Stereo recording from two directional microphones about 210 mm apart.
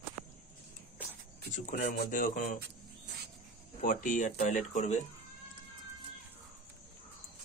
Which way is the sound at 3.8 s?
40° left (ahead or behind).